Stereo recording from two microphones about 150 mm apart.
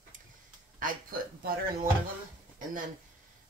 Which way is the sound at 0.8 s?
75° right (ahead or behind).